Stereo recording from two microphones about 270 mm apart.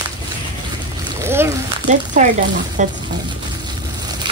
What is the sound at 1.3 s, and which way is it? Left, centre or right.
Speech, centre.